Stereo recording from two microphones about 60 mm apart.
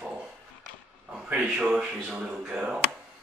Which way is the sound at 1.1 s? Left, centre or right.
Centre.